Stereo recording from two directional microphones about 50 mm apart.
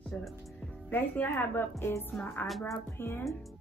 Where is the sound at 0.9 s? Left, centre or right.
Left.